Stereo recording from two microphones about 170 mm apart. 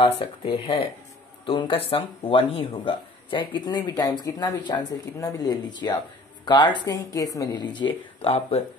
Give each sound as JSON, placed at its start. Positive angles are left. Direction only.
{"t": 0.0, "sound": "speech", "side_deg": 30}